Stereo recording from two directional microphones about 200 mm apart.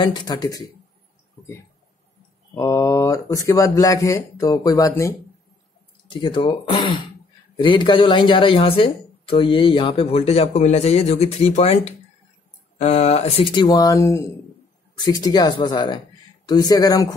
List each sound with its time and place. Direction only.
0.0 s speech: 20° left (ahead or behind)
2.5 s speech: 15° left (ahead or behind)